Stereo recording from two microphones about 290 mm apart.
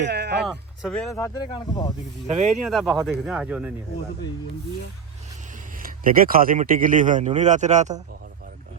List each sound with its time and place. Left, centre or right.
0.0 s a sound: right
0.4 s speech: centre
2.2 s speech: right
2.6 s speech: centre
5.8 s speech: right